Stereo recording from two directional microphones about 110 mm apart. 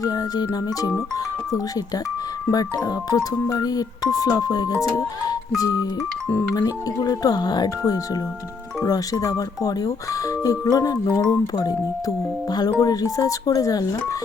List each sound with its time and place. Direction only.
0.0 s speech: 35° left (ahead or behind)
2.5 s speech: 35° left (ahead or behind)